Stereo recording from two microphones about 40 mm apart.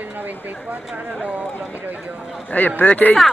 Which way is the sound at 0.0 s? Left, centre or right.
Right.